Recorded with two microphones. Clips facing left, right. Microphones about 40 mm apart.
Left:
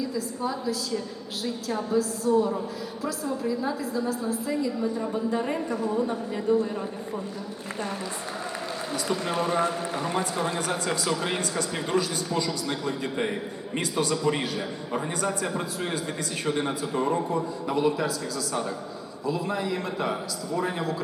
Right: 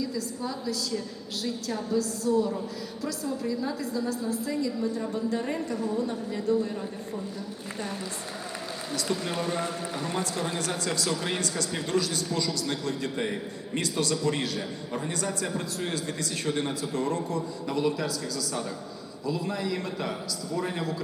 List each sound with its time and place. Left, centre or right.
0.0 s speech: centre
9.0 s speech: centre
19.2 s speech: centre